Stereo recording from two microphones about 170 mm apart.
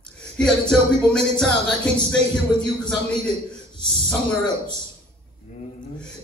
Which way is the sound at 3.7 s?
25° left (ahead or behind).